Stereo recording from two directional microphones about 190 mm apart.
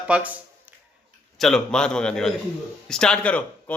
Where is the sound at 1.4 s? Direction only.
Centre (ahead or behind).